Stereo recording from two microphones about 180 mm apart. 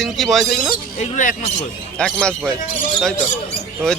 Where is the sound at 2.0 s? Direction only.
5° left (ahead or behind).